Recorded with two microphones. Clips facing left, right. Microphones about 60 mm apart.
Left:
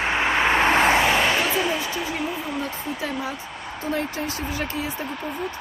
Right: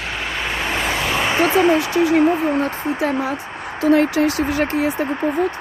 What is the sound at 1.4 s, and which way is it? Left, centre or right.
Speech, right.